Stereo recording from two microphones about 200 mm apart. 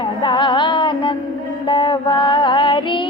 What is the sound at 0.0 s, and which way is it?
Music, 25° left (ahead or behind).